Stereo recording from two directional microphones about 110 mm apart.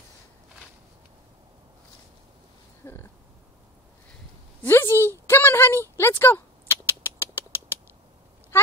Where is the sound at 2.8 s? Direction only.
20° left (ahead or behind).